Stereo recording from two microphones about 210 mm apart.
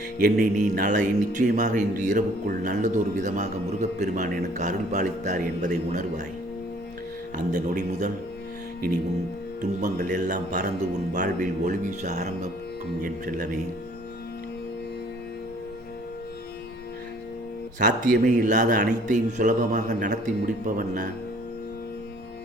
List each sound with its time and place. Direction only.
0.2 s a man's voice: 45° right (ahead or behind)
7.5 s a man's voice: 35° right (ahead or behind)
9.6 s a man's voice: 35° right (ahead or behind)
17.7 s a man's voice: 40° right (ahead or behind)